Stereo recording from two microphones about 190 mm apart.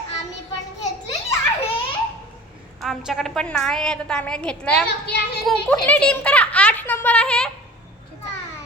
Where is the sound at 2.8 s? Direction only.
Centre (ahead or behind).